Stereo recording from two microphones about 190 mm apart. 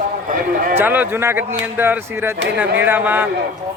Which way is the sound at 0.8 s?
10° right (ahead or behind).